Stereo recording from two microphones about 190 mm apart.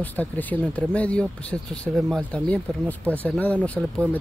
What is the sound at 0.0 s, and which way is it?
Speech, 10° left (ahead or behind).